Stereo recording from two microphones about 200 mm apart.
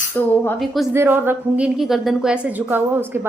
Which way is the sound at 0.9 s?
10° right (ahead or behind).